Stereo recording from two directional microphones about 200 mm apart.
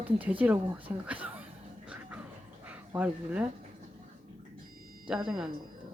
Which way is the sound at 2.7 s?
5° right (ahead or behind).